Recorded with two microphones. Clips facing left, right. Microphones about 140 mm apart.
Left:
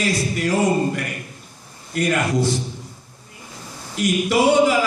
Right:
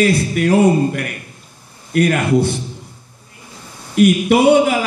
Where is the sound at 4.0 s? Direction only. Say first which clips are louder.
Right 7 dB; 60° right (ahead or behind).